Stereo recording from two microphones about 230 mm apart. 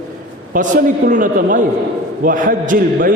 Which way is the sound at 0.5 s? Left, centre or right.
Right.